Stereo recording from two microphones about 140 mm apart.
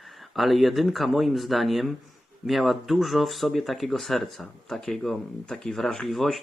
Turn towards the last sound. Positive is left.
turn(degrees=0)  # may be behind; listen again after turning